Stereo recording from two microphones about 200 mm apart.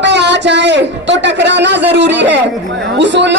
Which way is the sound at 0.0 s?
60° right (ahead or behind).